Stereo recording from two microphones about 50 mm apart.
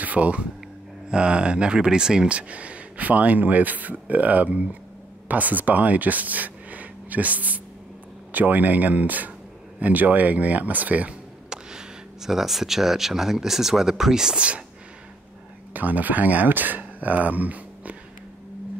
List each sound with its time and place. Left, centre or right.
0.0 s speech: right
11.5 s speech: centre
15.7 s speech: right